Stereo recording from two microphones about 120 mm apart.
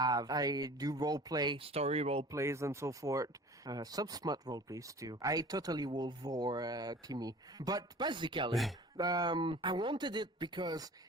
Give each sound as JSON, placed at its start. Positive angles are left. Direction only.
{"t": 0.0, "sound": "speech", "side_deg": -30}
{"t": 1.5, "sound": "speech", "side_deg": -55}
{"t": 2.3, "sound": "speech", "side_deg": -25}